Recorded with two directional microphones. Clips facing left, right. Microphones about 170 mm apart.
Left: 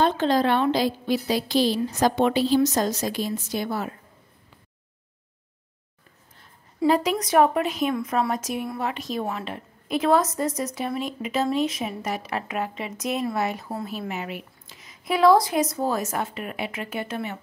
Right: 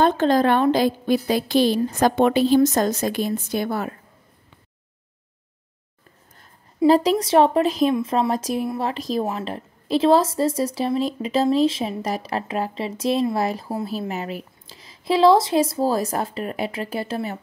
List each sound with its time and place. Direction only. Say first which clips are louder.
0.0 s a woman's voice: right 3 dB; 50° right (ahead or behind)
6.9 s speech: right 5 dB; 35° right (ahead or behind)